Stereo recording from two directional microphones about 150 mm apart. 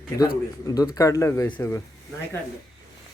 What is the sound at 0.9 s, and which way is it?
Speech, 20° left (ahead or behind).